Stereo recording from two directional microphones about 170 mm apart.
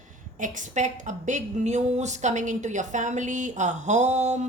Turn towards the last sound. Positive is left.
turn(degrees=-40)  # may be behind; listen again after turning